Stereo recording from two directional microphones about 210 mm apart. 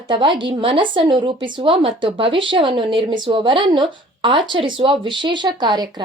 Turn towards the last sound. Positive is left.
turn(degrees=-20)  # may be behind; listen again after turning